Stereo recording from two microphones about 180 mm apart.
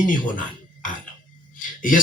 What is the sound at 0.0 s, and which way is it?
Speech, 50° left (ahead or behind).